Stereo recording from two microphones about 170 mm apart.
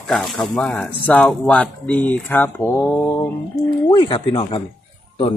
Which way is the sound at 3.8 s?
30° left (ahead or behind).